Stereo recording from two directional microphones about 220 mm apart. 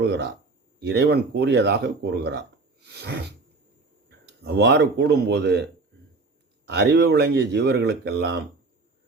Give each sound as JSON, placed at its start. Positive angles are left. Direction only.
{"t": 0.0, "sound": "speech", "side_deg": -50}
{"t": 6.7, "sound": "speech", "side_deg": -50}